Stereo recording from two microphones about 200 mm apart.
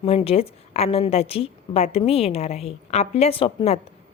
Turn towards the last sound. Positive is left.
turn(degrees=25)  # may be behind; listen again after turning